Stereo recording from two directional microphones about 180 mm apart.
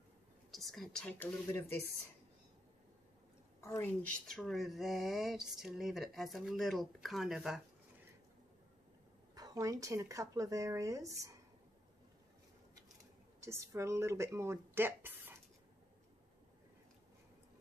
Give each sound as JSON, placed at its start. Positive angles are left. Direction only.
{"t": 0.5, "sound": "speech", "side_deg": 0}
{"t": 3.6, "sound": "speech", "side_deg": 15}
{"t": 9.3, "sound": "speech", "side_deg": -20}
{"t": 13.4, "sound": "speech", "side_deg": -15}